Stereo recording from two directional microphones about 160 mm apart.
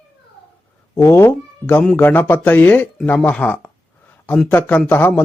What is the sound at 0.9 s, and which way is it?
A man's voice, 20° left (ahead or behind).